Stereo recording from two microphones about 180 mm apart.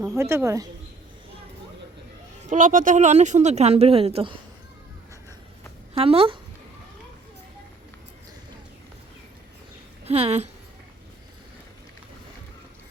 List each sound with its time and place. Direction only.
0.0 s speech: 15° right (ahead or behind)
2.5 s speech: 45° right (ahead or behind)
5.9 s speech: 30° right (ahead or behind)
10.1 s speech: 35° right (ahead or behind)